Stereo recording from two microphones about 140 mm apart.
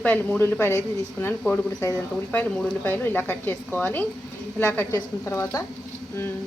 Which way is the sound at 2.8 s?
10° left (ahead or behind).